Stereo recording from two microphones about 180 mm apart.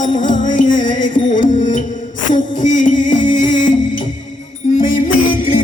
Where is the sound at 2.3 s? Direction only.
45° left (ahead or behind).